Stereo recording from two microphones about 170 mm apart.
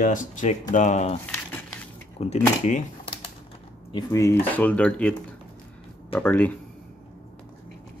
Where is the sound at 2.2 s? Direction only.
45° left (ahead or behind).